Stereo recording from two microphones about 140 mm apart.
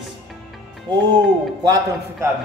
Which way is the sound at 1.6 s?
25° right (ahead or behind).